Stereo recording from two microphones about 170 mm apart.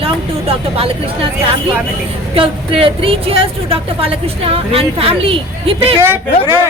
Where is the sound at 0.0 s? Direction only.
35° right (ahead or behind).